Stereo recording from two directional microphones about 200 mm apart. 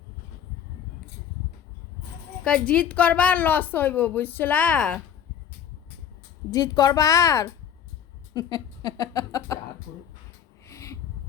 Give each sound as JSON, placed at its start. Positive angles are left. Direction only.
{"t": 2.4, "sound": "a woman's voice", "side_deg": 5}
{"t": 6.5, "sound": "a woman's voice", "side_deg": 20}
{"t": 10.7, "sound": "a sound", "side_deg": 15}